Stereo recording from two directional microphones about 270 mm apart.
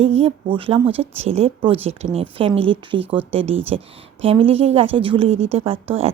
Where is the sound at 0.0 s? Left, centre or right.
Right.